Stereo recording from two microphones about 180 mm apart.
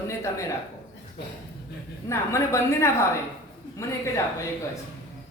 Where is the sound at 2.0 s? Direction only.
15° left (ahead or behind).